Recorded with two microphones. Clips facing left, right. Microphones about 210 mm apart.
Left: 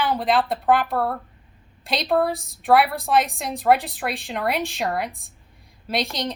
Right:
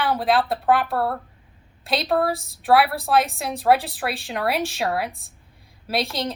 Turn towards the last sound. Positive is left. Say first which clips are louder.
# right 1 dB
turn(degrees=0)  # may be behind; listen again after turning